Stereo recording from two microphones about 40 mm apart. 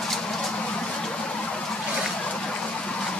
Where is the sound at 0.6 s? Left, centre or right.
Left.